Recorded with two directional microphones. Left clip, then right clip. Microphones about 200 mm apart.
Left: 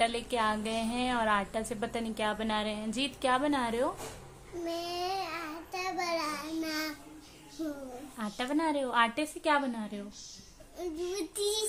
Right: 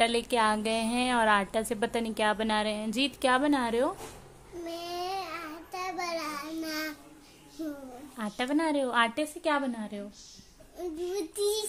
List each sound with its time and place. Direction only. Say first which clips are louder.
0.0 s a woman's voice: right 4 dB; 30° right (ahead or behind)
4.6 s child singing: left 1 dB; 5° right (ahead or behind)
8.2 s a woman's voice: right 3 dB; 30° right (ahead or behind)
10.8 s child singing: right 2 dB; 10° left (ahead or behind)